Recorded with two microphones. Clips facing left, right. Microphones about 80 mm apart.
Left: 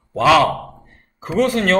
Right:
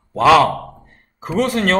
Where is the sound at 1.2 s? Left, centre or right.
Right.